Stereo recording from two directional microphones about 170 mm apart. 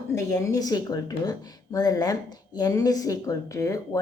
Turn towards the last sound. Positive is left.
turn(degrees=20)  # may be behind; listen again after turning